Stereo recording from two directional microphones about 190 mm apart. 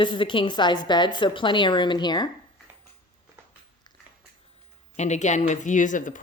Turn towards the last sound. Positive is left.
turn(degrees=40)  # may be behind; listen again after turning